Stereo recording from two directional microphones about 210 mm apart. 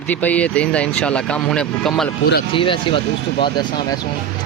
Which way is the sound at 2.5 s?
25° left (ahead or behind).